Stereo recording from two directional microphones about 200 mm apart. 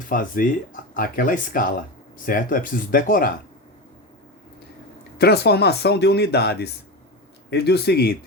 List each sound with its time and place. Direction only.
0.1 s speech: 45° left (ahead or behind)
5.1 s speech: 55° left (ahead or behind)